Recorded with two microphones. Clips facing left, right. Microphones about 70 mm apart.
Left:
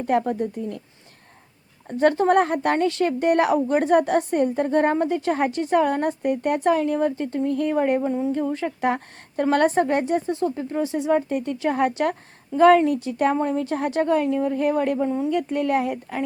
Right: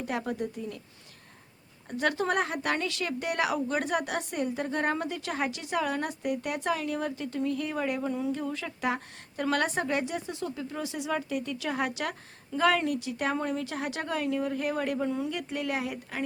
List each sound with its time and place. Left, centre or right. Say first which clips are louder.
0.0 s a woman's voice: left 10 dB; left
0.5 s speech: left 7 dB; left
1.9 s a woman's voice: left 10 dB; left